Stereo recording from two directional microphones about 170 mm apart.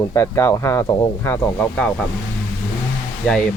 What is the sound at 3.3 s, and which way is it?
Speech, 5° left (ahead or behind).